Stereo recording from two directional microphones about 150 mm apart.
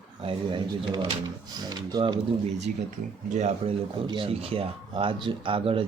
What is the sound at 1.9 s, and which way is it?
Speech, 30° right (ahead or behind).